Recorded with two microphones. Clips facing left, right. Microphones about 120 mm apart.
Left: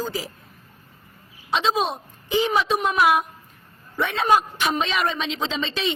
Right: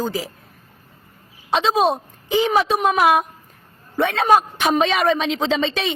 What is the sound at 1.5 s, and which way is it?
Speech, 40° right (ahead or behind).